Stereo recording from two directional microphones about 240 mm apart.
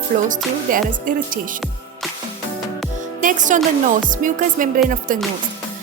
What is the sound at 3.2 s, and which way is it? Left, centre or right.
Speech, right.